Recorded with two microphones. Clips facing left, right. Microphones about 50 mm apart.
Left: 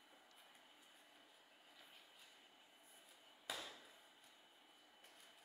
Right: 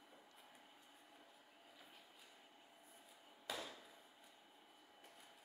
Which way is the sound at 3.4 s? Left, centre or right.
Centre.